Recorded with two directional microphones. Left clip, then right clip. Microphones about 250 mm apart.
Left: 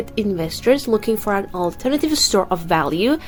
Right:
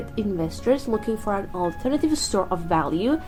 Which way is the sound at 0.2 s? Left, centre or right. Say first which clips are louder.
Left 4 dB; left.